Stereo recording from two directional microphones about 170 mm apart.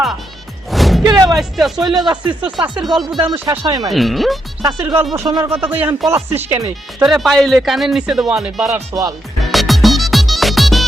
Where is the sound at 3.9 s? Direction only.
Centre (ahead or behind).